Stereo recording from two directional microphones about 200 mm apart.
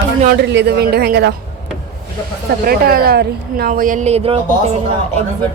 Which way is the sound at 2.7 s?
50° right (ahead or behind).